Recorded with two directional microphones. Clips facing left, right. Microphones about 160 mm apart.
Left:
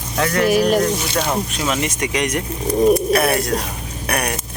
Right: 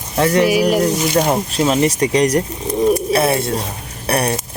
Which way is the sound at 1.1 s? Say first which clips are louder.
Right 5 dB; 35° right (ahead or behind).